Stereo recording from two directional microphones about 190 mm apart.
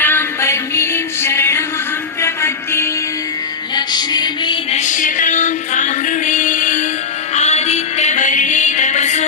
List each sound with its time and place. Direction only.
0.0 s music: 10° left (ahead or behind)
4.7 s music: 40° left (ahead or behind)